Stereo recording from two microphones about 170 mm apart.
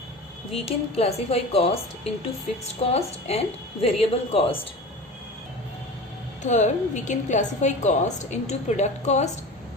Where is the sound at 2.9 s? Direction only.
35° left (ahead or behind).